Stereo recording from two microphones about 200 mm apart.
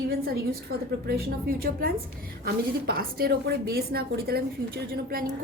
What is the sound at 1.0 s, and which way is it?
A woman's voice, 50° right (ahead or behind).